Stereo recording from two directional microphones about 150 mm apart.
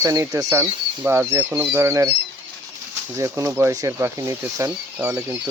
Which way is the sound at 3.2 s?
20° right (ahead or behind).